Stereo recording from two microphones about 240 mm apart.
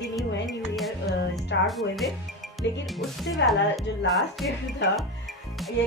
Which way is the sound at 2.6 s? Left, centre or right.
Left.